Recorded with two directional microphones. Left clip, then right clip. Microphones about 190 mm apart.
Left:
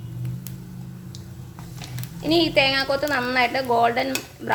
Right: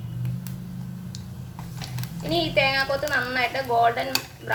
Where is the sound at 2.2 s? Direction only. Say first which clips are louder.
Left 3 dB; 55° left (ahead or behind).